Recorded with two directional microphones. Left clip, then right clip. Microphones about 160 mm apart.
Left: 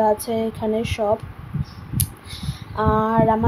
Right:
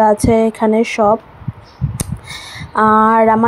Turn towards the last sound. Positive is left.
turn(degrees=-45)  # may be behind; listen again after turning